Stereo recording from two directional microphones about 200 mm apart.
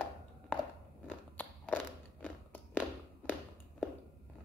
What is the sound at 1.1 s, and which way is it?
Walk, 10° left (ahead or behind).